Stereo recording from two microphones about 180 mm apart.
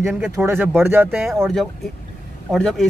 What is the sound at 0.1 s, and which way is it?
Speech, centre (ahead or behind).